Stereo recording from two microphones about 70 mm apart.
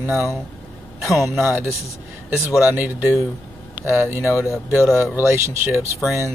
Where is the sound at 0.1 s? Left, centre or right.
Left.